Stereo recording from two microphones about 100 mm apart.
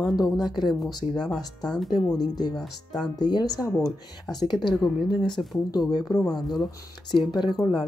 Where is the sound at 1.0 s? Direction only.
90° left.